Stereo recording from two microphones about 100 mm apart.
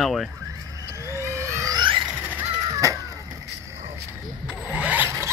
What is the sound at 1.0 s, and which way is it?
Vehicle, 30° right (ahead or behind).